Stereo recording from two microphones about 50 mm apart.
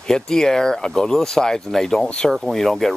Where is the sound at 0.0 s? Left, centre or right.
Centre.